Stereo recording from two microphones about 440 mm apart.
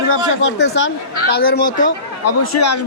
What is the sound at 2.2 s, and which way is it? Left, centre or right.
Speech, left.